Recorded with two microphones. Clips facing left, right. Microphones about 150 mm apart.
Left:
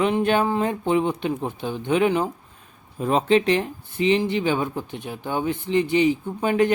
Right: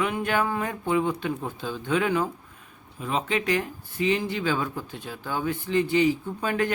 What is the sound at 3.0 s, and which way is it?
Speech, 40° left (ahead or behind).